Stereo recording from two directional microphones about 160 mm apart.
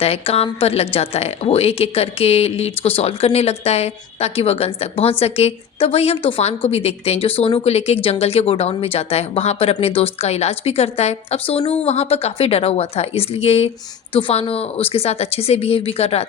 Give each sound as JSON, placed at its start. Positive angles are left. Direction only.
{"t": 0.0, "sound": "speech", "side_deg": 40}